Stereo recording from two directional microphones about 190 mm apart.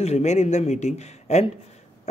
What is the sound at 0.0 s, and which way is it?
Speech, 35° left (ahead or behind).